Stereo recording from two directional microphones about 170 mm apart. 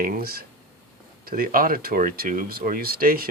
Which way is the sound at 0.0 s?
60° right (ahead or behind).